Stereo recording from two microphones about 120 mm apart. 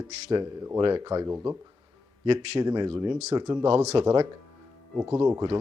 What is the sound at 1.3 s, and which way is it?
Speech, 20° right (ahead or behind).